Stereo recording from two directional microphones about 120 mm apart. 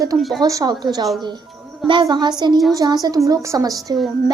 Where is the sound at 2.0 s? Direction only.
40° right (ahead or behind).